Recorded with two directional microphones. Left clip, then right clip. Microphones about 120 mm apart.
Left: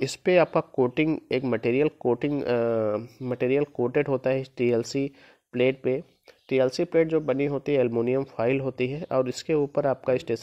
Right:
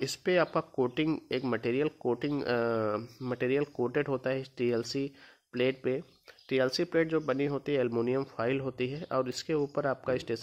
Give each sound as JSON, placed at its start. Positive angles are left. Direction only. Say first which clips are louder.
{"t": 0.0, "sound": "speech", "louder": "left 7 dB", "side_deg": 30}